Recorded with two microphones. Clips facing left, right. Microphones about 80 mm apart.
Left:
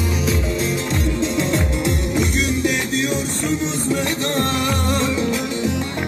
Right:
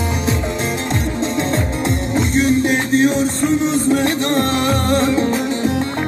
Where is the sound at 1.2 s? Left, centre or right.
Right.